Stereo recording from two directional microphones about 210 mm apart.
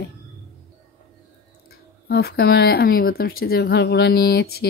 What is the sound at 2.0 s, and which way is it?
Speech, 50° left (ahead or behind).